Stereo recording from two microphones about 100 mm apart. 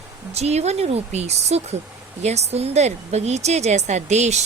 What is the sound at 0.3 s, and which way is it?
Speech, 90° right.